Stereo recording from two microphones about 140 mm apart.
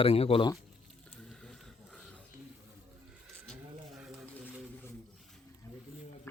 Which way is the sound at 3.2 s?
Centre (ahead or behind).